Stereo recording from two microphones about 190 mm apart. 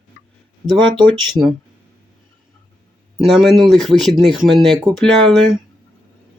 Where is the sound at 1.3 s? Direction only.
Centre (ahead or behind).